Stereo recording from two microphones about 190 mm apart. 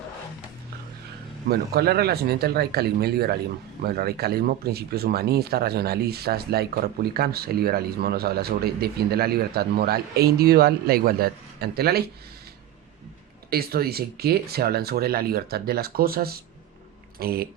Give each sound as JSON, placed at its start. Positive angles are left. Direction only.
{"t": 1.5, "sound": "speech", "side_deg": -55}
{"t": 13.5, "sound": "speech", "side_deg": -55}